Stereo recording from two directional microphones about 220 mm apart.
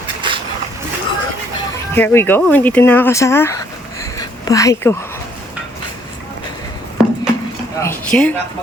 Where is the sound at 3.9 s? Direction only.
15° left (ahead or behind).